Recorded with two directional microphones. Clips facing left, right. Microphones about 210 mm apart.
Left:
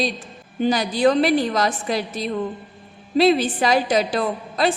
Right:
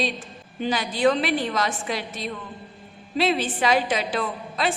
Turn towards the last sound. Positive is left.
turn(degrees=40)  # may be behind; listen again after turning